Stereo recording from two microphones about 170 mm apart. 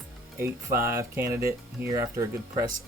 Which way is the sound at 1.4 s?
65° right (ahead or behind).